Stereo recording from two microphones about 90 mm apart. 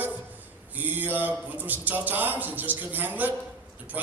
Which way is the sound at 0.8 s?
20° right (ahead or behind).